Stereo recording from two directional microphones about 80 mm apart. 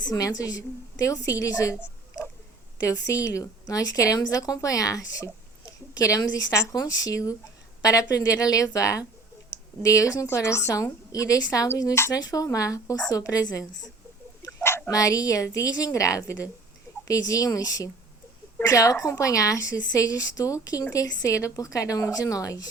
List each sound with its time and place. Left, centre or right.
0.1 s a woman's voice: left
2.8 s a woman's voice: left
14.8 s a woman's voice: left